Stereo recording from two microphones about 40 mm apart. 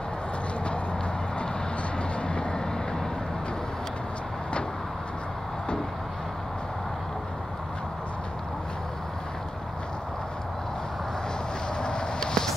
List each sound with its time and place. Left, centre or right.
2.2 s vehicle: left
11.8 s vehicle: left